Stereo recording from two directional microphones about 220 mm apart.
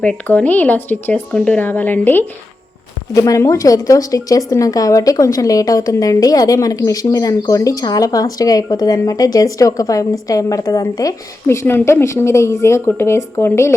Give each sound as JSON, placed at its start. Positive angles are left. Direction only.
{"t": 0.0, "sound": "a woman's voice", "side_deg": 5}